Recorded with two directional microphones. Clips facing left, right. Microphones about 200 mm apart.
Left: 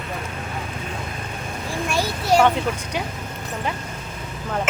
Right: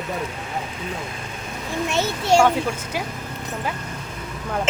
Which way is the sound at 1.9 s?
25° right (ahead or behind).